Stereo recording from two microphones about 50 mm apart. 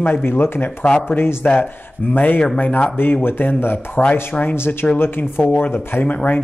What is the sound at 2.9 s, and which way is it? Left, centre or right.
Speech, left.